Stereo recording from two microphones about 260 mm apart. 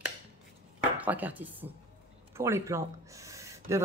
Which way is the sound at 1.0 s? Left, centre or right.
Centre.